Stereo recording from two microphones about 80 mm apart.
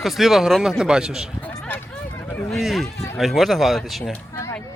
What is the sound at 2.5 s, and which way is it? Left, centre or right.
Speech, centre.